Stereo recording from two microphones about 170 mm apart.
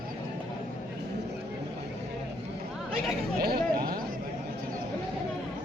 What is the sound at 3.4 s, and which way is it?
Speech, 65° right (ahead or behind).